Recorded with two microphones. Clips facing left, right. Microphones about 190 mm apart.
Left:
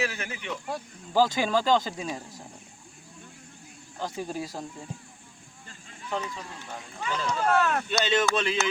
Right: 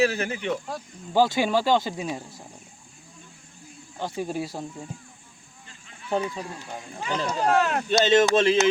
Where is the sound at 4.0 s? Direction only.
5° right (ahead or behind).